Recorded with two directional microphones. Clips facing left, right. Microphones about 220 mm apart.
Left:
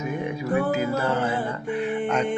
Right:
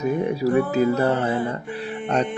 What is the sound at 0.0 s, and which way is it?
Speech, 35° right (ahead or behind).